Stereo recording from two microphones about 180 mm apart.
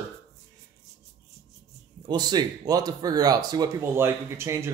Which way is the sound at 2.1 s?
20° right (ahead or behind).